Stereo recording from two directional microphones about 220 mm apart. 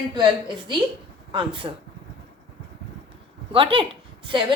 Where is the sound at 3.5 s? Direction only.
25° right (ahead or behind).